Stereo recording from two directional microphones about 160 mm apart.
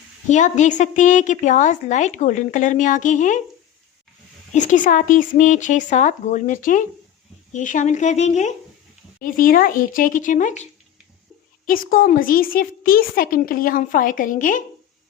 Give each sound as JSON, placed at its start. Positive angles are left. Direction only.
{"t": 0.3, "sound": "a woman's voice", "side_deg": 50}
{"t": 4.5, "sound": "a woman's voice", "side_deg": 50}
{"t": 9.2, "sound": "speech", "side_deg": 60}
{"t": 11.6, "sound": "speech", "side_deg": 60}